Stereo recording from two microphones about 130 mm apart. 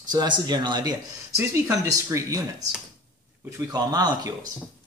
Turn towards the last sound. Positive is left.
turn(degrees=-30)  # may be behind; listen again after turning